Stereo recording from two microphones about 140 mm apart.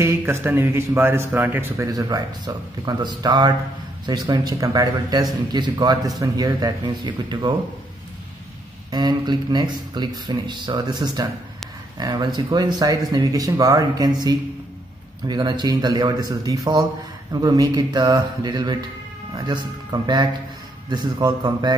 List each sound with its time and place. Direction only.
0.0 s a man's voice: 15° right (ahead or behind)
8.9 s a man's voice: 30° right (ahead or behind)